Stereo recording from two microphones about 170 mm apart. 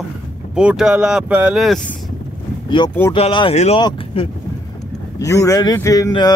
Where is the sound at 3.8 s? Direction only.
25° left (ahead or behind).